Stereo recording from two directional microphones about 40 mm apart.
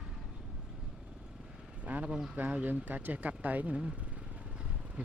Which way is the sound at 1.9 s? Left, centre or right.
Right.